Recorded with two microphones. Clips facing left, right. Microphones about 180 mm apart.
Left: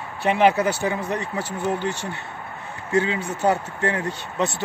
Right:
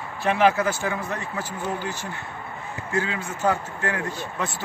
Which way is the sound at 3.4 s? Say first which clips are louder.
Left 3 dB; 20° left (ahead or behind).